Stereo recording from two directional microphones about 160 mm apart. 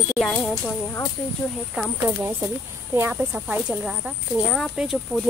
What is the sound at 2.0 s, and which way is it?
Speech, 20° right (ahead or behind).